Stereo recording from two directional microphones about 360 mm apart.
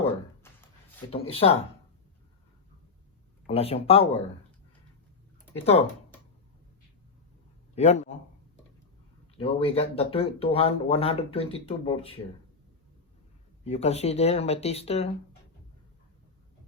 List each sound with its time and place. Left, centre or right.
0.4 s a sound: centre
1.1 s speech: centre
3.4 s speech: centre
5.5 s speech: centre
7.8 s a man's voice: centre
9.4 s speech: centre
13.7 s speech: centre